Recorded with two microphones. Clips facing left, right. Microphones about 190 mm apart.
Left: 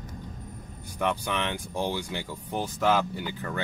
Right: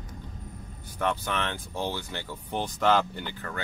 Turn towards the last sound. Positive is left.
turn(degrees=5)  # may be behind; listen again after turning